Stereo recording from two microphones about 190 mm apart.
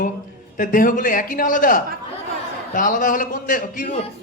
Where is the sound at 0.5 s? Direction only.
45° left (ahead or behind).